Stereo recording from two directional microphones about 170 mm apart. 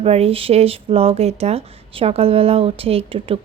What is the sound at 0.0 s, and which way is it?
Speech, 35° right (ahead or behind).